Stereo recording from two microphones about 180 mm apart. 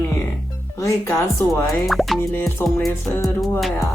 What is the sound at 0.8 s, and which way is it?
Speech, 15° left (ahead or behind).